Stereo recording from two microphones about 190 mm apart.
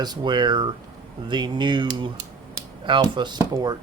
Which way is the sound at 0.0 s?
20° right (ahead or behind).